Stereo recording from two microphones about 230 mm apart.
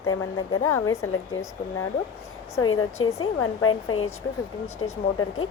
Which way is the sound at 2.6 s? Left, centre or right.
Left.